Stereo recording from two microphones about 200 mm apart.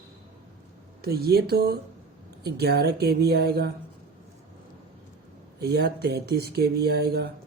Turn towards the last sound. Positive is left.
turn(degrees=-50)  # may be behind; listen again after turning